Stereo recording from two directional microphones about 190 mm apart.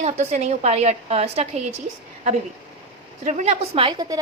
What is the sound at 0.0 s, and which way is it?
A woman's voice, 35° right (ahead or behind).